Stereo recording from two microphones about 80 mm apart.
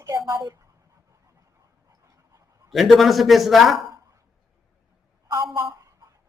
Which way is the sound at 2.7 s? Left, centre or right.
Centre.